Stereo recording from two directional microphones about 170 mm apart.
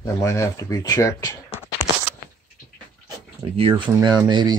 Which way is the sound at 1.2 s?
20° left (ahead or behind).